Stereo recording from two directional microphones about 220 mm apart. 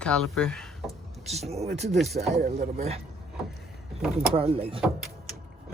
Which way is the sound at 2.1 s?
30° right (ahead or behind).